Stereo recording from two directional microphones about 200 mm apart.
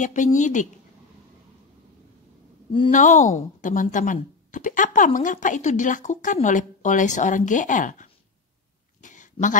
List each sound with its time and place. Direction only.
0.0 s speech: 40° left (ahead or behind)
2.9 s speech: 40° left (ahead or behind)
9.0 s a sound: 40° left (ahead or behind)